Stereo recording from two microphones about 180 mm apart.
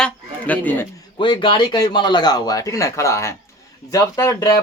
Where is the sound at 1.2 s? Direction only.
25° left (ahead or behind).